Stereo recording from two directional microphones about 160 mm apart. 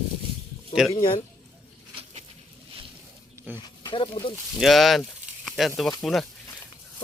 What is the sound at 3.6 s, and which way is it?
Speech, 30° left (ahead or behind).